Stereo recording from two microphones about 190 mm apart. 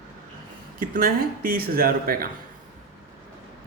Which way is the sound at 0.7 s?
45° right (ahead or behind).